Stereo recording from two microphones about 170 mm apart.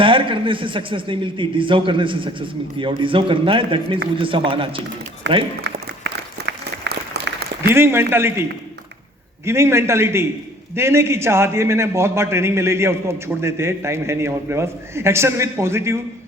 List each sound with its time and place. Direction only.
0.0 s a man's voice: 30° right (ahead or behind)
5.2 s speech: 90° right
5.6 s applause: 90° right; by 7.7 s 75° right (ahead or behind)
7.7 s a man's voice: 15° right (ahead or behind)